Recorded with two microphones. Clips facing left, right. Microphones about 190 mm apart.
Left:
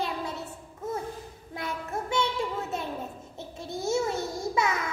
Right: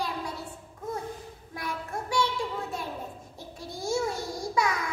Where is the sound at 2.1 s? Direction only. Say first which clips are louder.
Even; 25° left (ahead or behind).